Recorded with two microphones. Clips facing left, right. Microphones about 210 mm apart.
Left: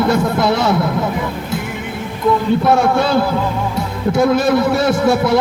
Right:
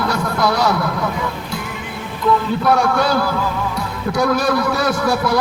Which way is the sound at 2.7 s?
25° left (ahead or behind).